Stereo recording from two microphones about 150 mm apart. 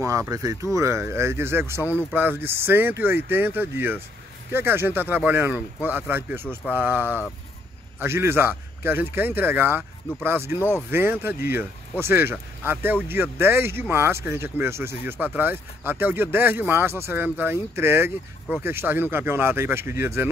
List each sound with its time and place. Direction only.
0.0 s speech: 20° right (ahead or behind)